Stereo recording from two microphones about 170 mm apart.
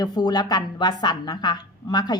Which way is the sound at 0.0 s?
25° left (ahead or behind).